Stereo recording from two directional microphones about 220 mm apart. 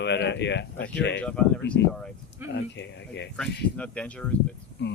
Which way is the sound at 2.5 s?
55° left (ahead or behind).